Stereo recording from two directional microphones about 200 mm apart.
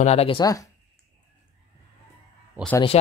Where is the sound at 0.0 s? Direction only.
30° left (ahead or behind).